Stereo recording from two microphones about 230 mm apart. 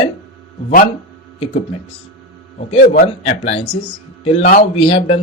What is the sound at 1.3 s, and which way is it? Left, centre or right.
Speech, left.